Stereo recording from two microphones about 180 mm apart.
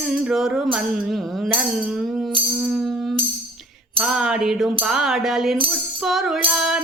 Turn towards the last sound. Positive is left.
turn(degrees=-5)  # may be behind; listen again after turning